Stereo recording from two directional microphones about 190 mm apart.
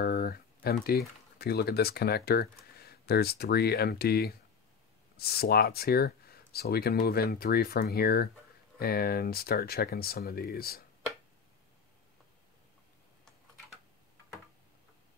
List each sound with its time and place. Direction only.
0.0 s speech: 55° left (ahead or behind)